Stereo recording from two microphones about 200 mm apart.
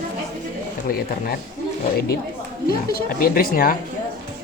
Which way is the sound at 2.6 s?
45° left (ahead or behind).